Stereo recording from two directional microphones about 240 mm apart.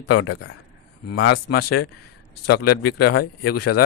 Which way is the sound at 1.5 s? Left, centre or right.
Left.